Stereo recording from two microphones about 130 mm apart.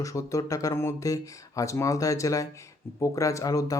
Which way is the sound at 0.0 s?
25° left (ahead or behind).